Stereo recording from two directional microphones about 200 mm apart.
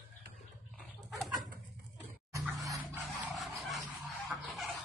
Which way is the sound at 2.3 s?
15° right (ahead or behind).